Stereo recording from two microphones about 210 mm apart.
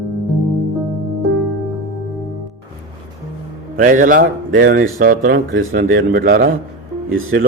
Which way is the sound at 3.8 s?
40° right (ahead or behind).